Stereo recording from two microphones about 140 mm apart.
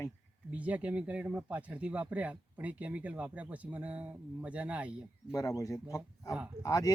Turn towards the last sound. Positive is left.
turn(degrees=25)  # may be behind; listen again after turning